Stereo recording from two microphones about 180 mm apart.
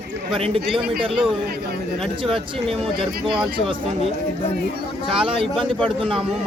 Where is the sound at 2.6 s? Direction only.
Centre (ahead or behind).